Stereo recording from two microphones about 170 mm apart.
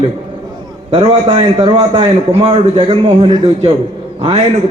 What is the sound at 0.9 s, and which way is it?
A man's voice, 35° right (ahead or behind).